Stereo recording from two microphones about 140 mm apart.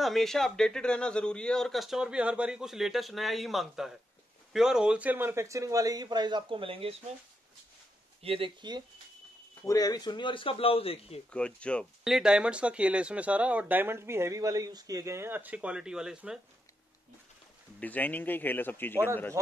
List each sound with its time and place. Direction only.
0.0 s speech: centre (ahead or behind); by 7.0 s 40° right (ahead or behind)
8.2 s speech: 40° right (ahead or behind)
9.6 s speech: 25° left (ahead or behind); by 11.1 s 45° left (ahead or behind)
11.3 s a man's voice: 10° left (ahead or behind)
12.0 s speech: 5° right (ahead or behind)
17.7 s a man's voice: 10° left (ahead or behind)